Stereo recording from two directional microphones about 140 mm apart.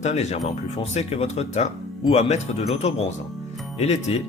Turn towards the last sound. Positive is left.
turn(degrees=50)  # may be behind; listen again after turning